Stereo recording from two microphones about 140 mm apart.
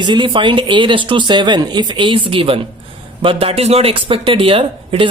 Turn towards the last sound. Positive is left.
turn(degrees=-40)  # may be behind; listen again after turning